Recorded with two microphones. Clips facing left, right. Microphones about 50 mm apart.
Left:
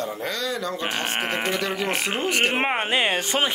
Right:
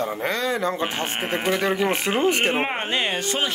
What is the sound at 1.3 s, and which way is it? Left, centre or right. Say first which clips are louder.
Speech: right 6 dB; centre.